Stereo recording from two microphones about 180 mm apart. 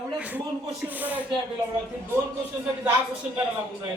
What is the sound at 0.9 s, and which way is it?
Speech, 10° right (ahead or behind).